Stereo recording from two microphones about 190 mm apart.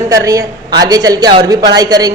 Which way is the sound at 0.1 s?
15° right (ahead or behind).